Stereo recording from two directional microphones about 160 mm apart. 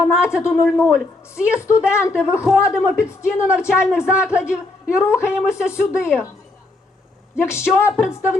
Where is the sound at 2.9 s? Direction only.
15° left (ahead or behind).